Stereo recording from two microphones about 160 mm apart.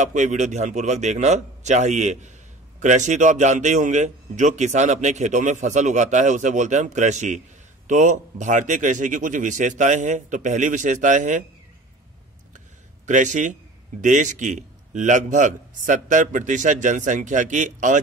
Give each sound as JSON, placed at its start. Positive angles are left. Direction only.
{"t": 0.0, "sound": "a man's voice", "side_deg": -50}
{"t": 13.0, "sound": "a man's voice", "side_deg": -50}